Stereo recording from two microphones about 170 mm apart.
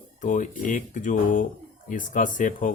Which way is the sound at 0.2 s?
50° left (ahead or behind).